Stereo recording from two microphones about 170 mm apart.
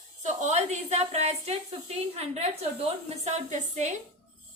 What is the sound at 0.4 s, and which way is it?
A woman's voice, 45° right (ahead or behind).